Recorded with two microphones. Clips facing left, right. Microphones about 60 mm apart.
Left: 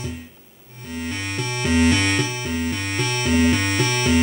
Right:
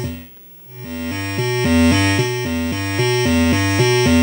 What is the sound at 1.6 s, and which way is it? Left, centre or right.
Music, right.